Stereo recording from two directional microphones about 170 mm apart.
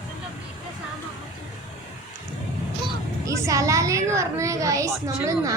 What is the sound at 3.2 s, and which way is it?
A woman's voice, 20° right (ahead or behind).